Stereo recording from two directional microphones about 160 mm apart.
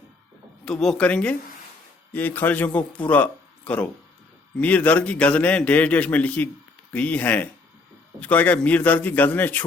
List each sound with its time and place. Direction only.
0.6 s a man's voice: 5° left (ahead or behind)